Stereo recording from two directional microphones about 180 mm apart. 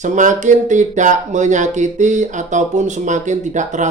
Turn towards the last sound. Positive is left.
turn(degrees=-40)  # may be behind; listen again after turning